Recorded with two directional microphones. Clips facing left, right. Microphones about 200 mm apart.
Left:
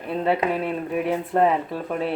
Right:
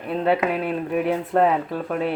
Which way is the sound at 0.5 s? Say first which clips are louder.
Right 1 dB; centre (ahead or behind).